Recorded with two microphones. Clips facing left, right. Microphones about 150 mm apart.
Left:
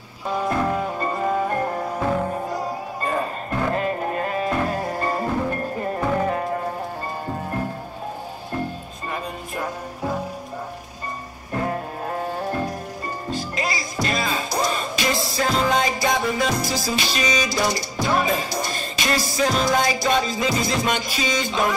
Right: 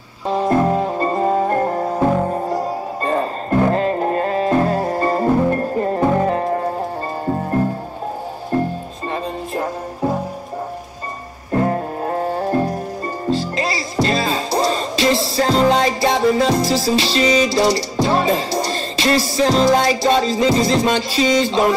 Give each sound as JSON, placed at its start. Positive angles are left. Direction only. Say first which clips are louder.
{"t": 0.3, "sound": "music", "louder": "right 6 dB", "side_deg": -30}
{"t": 9.1, "sound": "music", "louder": "right 6 dB", "side_deg": -35}
{"t": 11.5, "sound": "music", "louder": "right 7 dB", "side_deg": -40}